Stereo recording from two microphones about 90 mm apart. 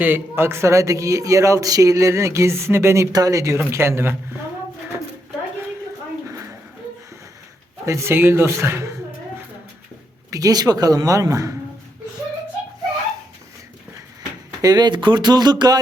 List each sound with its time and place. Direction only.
0.0 s a man's voice: 25° right (ahead or behind)
3.1 s a man's voice: 40° right (ahead or behind)
6.2 s a sound: 35° right (ahead or behind)
7.9 s speech: 30° right (ahead or behind)
10.3 s a man's voice: 45° right (ahead or behind)
14.6 s speech: 50° right (ahead or behind)